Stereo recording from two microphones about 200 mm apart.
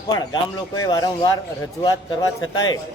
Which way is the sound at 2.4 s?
90° left.